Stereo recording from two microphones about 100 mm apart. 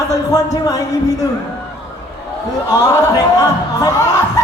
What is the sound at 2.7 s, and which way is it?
A woman's voice, 40° left (ahead or behind).